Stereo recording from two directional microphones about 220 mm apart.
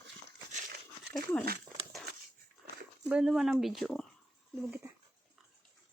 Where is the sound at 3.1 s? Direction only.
5° right (ahead or behind).